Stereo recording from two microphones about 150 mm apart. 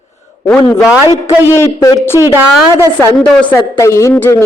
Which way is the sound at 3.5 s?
20° left (ahead or behind).